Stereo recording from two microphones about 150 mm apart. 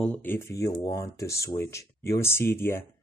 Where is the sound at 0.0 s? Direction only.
10° left (ahead or behind).